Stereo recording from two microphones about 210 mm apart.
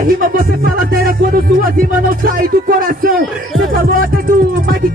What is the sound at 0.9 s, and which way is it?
Speech, 45° right (ahead or behind).